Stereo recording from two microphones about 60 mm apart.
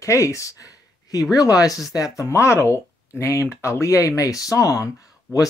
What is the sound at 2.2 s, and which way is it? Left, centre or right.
Speech, left.